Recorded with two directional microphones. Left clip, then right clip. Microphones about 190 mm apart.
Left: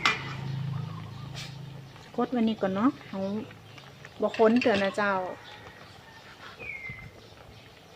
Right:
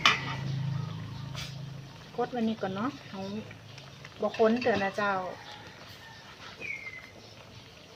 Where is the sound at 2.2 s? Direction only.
55° left (ahead or behind).